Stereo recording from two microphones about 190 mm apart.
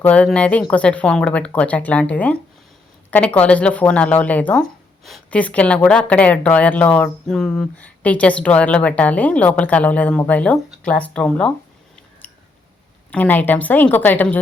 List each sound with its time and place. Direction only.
0.0 s speech: 5° left (ahead or behind)
12.2 s scissors: 10° left (ahead or behind)
13.1 s speech: 10° left (ahead or behind)